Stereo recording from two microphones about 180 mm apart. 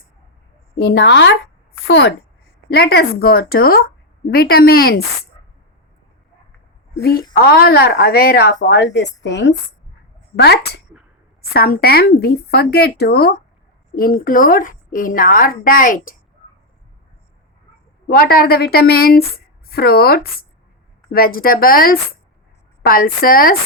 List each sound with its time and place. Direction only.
0.9 s a woman's voice: 85° left
2.6 s a woman's voice: 65° left (ahead or behind)
7.3 s a woman's voice: 60° left (ahead or behind)
8.6 s a woman's voice: 75° left (ahead or behind)
10.3 s a woman's voice: 65° left (ahead or behind); by 16.1 s 50° left (ahead or behind)
18.1 s a woman's voice: 55° left (ahead or behind)